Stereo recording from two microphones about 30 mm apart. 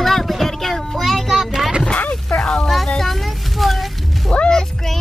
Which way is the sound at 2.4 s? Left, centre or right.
Centre.